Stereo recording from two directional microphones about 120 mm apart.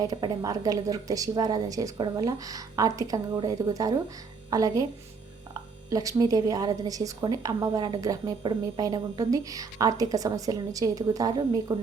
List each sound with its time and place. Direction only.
0.0 s a woman's voice: 30° right (ahead or behind)
5.9 s a woman's voice: 30° right (ahead or behind)